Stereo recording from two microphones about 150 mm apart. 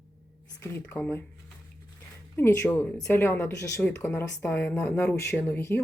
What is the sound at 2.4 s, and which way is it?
Speech, 15° left (ahead or behind).